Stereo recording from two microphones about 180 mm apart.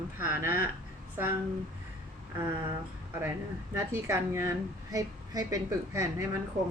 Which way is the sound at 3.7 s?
15° right (ahead or behind).